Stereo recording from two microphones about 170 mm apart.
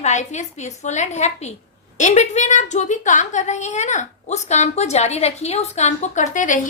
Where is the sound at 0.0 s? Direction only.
45° left (ahead or behind).